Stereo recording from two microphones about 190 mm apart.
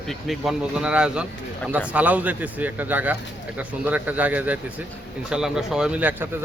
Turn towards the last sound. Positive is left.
turn(degrees=-5)  # may be behind; listen again after turning